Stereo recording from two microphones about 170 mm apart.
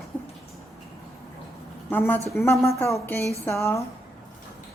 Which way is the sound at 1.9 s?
10° left (ahead or behind).